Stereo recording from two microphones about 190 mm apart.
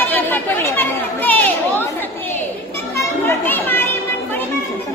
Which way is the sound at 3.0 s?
10° left (ahead or behind).